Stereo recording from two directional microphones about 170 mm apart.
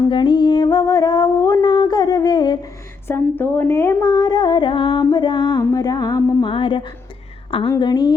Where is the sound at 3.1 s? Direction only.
15° left (ahead or behind).